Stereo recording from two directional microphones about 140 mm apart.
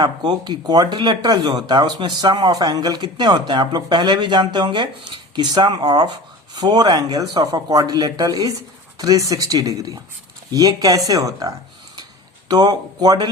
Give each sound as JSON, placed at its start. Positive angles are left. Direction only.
{"t": 0.0, "sound": "speech", "side_deg": -35}